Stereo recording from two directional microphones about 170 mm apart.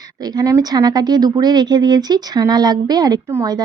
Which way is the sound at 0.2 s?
20° right (ahead or behind).